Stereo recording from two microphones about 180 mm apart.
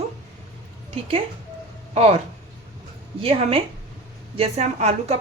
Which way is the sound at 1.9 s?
35° right (ahead or behind).